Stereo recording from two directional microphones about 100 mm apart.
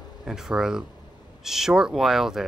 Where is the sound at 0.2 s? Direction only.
5° right (ahead or behind).